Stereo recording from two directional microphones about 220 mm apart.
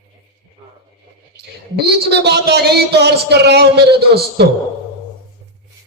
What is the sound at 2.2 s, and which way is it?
A man's voice, 45° right (ahead or behind).